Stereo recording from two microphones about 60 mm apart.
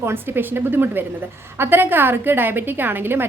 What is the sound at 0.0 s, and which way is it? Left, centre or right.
A woman's voice, right.